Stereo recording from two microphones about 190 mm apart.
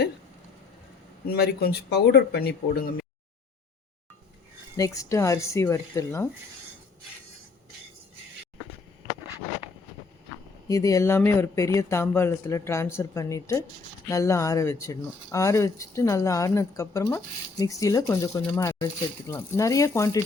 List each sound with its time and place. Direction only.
1.3 s speech: 55° left (ahead or behind)
4.8 s speech: 15° left (ahead or behind)
10.7 s speech: 15° left (ahead or behind)